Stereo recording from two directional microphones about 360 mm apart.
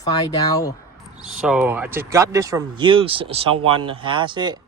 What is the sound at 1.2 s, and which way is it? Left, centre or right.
A man's voice, centre.